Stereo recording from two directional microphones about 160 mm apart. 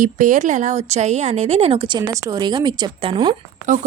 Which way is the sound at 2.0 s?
25° right (ahead or behind).